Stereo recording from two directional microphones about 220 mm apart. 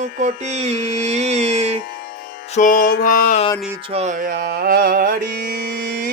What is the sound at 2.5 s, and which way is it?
Music, 35° left (ahead or behind).